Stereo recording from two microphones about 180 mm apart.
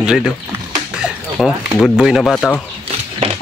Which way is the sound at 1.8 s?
5° right (ahead or behind).